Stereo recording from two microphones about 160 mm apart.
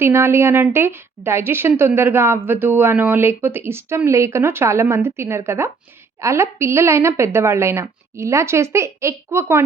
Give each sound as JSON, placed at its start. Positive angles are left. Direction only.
{"t": 0.0, "sound": "a woman's voice", "side_deg": -15}